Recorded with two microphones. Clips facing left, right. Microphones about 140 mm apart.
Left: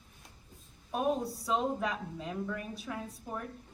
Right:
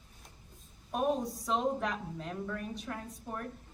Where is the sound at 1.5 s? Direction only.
Centre (ahead or behind).